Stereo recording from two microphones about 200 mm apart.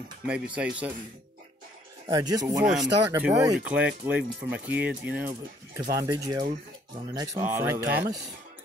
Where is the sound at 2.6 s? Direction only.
Centre (ahead or behind).